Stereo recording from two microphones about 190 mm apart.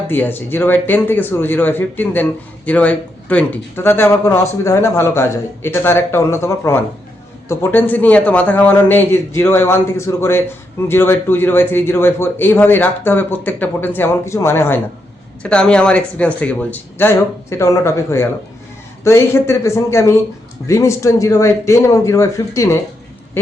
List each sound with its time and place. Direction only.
0.1 s speech: 10° left (ahead or behind)